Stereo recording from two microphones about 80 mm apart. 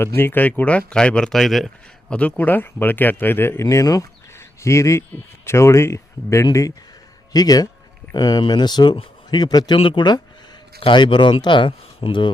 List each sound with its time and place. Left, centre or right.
0.0 s speech: left; by 2.1 s centre
2.1 s speech: centre; by 4.0 s left
4.4 s a sound: left
5.5 s speech: left